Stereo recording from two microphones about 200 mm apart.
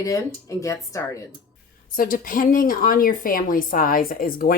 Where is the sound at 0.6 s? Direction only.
15° left (ahead or behind).